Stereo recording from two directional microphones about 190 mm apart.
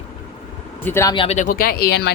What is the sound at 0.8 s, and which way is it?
Speech, 15° left (ahead or behind).